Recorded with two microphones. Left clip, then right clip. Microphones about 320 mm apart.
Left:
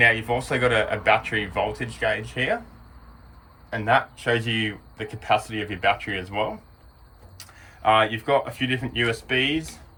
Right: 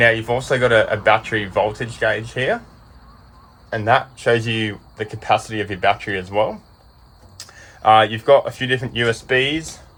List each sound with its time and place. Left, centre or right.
0.0 s speech: right
3.7 s speech: right